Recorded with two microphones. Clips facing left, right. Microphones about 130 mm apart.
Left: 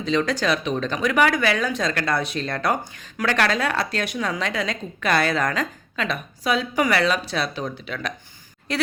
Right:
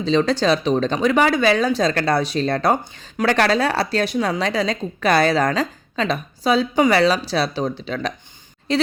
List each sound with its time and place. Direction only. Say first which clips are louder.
0.0 s a woman's voice: right 4 dB; 30° right (ahead or behind)